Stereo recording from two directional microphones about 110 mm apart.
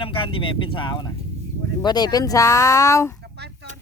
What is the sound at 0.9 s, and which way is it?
Speech, 35° left (ahead or behind).